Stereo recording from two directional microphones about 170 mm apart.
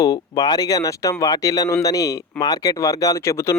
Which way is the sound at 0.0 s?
20° left (ahead or behind).